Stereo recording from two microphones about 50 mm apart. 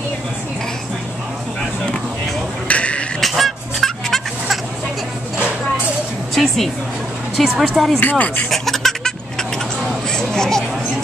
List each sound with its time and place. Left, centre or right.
2.7 s a sound: left
3.2 s goose: centre
6.3 s music: centre
7.3 s speech: centre
8.0 s speech: left
8.5 s a sound: centre